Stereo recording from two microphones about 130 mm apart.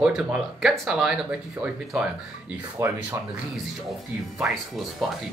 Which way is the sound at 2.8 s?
20° right (ahead or behind).